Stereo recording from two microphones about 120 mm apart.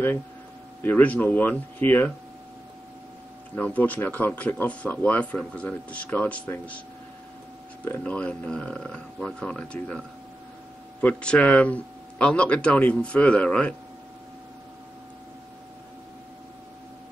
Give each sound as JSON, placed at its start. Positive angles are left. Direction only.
{"t": 0.8, "sound": "speech", "side_deg": 15}
{"t": 3.5, "sound": "speech", "side_deg": 15}
{"t": 7.8, "sound": "speech", "side_deg": 15}
{"t": 11.0, "sound": "speech", "side_deg": 10}